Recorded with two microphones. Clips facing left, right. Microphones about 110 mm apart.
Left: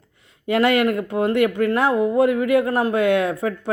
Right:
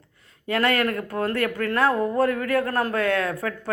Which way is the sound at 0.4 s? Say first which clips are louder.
Left 5 dB; 25° left (ahead or behind).